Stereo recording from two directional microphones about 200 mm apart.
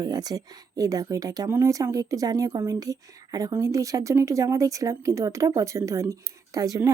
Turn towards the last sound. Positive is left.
turn(degrees=-15)  # may be behind; listen again after turning